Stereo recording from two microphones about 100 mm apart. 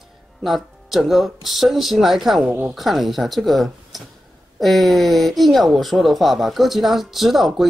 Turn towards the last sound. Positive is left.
turn(degrees=0)  # may be behind; listen again after turning